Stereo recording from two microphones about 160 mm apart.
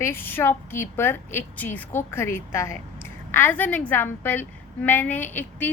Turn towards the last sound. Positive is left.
turn(degrees=10)  # may be behind; listen again after turning